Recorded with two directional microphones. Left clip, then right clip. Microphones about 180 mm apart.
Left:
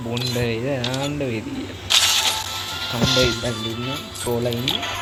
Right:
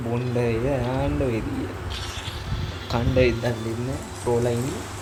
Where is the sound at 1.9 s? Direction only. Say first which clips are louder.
Left 16 dB; 60° left (ahead or behind).